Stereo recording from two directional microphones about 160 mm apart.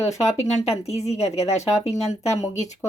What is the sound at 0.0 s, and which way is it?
Speech, 45° left (ahead or behind).